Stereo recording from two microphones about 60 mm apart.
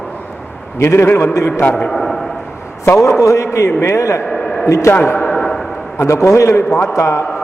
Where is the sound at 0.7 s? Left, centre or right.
Left.